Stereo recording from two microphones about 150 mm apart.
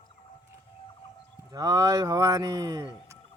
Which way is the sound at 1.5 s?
25° right (ahead or behind).